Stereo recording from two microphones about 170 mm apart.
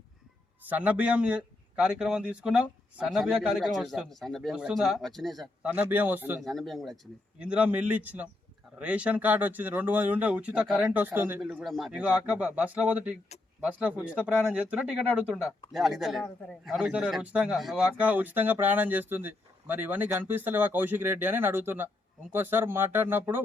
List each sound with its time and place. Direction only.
0.6 s speech: 10° right (ahead or behind)
5.7 s a man's voice: 10° right (ahead or behind)
6.4 s a man's voice: centre (ahead or behind)